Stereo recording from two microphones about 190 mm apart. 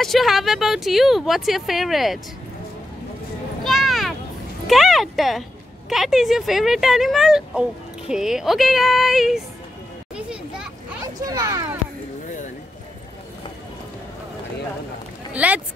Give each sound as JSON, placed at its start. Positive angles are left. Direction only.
{"t": 0.0, "sound": "speech", "side_deg": 0}
{"t": 3.6, "sound": "a sound", "side_deg": 0}
{"t": 5.9, "sound": "speech", "side_deg": 0}
{"t": 10.1, "sound": "children playing", "side_deg": -5}
{"t": 11.1, "sound": "speech", "side_deg": -20}
{"t": 15.3, "sound": "speech", "side_deg": -5}